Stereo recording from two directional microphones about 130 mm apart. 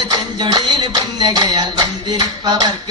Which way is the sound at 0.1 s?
35° right (ahead or behind).